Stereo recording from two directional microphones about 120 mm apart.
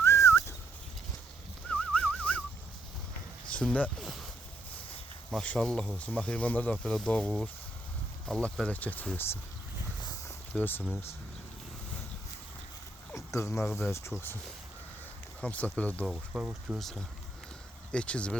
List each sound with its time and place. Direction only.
0.0 s a sound: 20° left (ahead or behind)
1.6 s a sound: 10° left (ahead or behind)
3.5 s speech: 10° left (ahead or behind)
4.0 s speech: centre (ahead or behind)
5.3 s speech: 10° left (ahead or behind)
10.5 s speech: 15° left (ahead or behind)
13.1 s speech: 25° left (ahead or behind)
15.4 s speech: 10° left (ahead or behind)
16.0 s speech: centre (ahead or behind)
16.4 s speech: 10° right (ahead or behind)
16.7 s speech: centre (ahead or behind)